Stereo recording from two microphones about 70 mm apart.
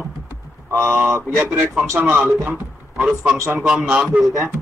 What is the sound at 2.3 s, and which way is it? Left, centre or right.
Speech, right.